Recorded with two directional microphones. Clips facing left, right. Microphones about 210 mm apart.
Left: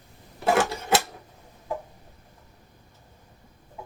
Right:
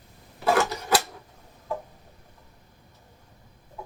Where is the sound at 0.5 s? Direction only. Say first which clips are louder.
Left 1 dB; 25° left (ahead or behind).